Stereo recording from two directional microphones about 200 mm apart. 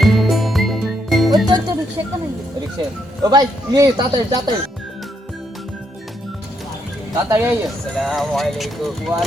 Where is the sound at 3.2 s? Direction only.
20° right (ahead or behind).